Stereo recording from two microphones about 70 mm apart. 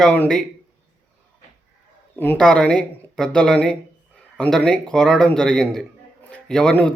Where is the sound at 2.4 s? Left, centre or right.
Centre.